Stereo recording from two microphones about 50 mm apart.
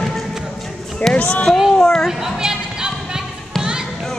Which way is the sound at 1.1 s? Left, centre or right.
Left.